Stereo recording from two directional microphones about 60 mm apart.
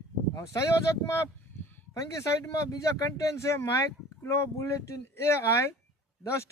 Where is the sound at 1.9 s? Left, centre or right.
Left.